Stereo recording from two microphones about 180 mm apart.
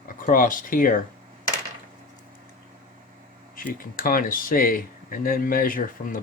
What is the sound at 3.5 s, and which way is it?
Speech, 50° left (ahead or behind).